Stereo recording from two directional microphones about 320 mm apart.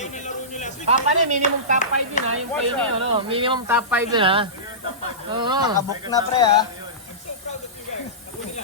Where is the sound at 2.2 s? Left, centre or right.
Left.